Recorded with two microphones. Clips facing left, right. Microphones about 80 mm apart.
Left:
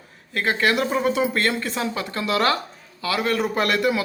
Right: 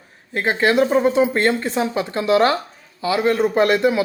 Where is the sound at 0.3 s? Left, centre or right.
Right.